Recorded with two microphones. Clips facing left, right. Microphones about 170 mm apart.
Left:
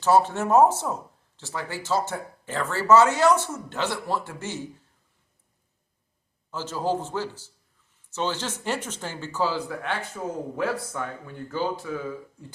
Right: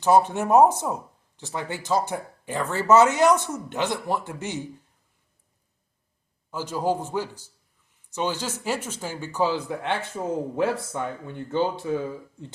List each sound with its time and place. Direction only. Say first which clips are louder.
0.0 s speech: right 1 dB; 15° right (ahead or behind)
6.5 s speech: right 1 dB; 15° right (ahead or behind)